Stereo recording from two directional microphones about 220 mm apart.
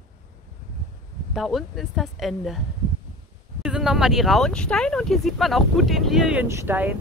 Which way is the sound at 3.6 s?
5° right (ahead or behind).